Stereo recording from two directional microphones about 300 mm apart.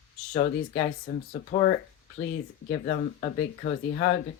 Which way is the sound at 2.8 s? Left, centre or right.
Left.